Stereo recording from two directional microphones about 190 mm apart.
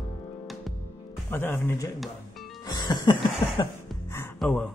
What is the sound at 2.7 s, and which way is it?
Music, 20° left (ahead or behind).